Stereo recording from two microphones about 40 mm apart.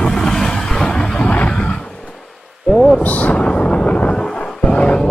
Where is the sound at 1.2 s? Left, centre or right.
Left.